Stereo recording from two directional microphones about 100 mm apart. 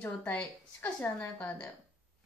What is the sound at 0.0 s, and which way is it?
A woman's voice, 15° left (ahead or behind).